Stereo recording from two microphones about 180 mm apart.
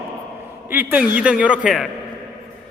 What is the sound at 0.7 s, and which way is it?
A woman's voice, 10° right (ahead or behind).